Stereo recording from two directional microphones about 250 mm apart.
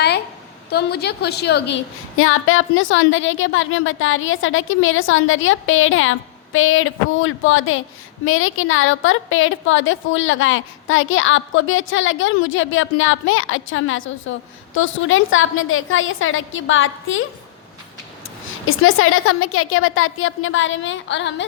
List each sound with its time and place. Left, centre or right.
0.7 s a woman's voice: left
18.6 s a woman's voice: left